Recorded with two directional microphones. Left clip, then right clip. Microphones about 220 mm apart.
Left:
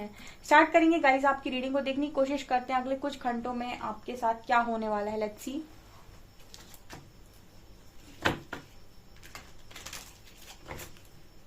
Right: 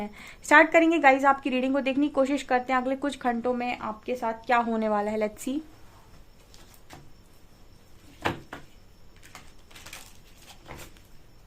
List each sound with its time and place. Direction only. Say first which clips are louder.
0.0 s a woman's voice: right 5 dB; 45° right (ahead or behind)